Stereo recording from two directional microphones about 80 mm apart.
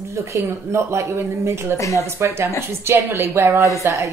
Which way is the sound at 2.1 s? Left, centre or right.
Right.